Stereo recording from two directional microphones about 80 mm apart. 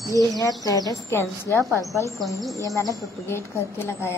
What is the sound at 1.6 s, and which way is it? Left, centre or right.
Speech, right.